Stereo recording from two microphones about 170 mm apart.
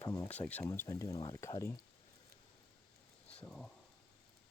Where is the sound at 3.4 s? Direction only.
5° left (ahead or behind).